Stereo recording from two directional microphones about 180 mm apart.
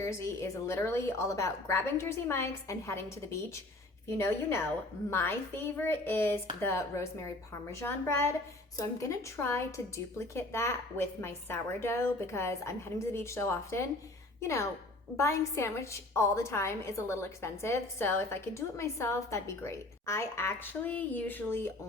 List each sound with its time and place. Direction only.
0.0 s a woman's voice: 15° left (ahead or behind)